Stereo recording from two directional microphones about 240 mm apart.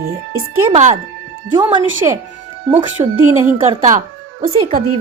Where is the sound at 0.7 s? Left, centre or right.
Right.